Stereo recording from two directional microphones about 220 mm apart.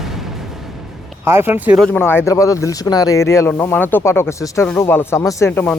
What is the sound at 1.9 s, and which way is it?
Speech, 10° left (ahead or behind).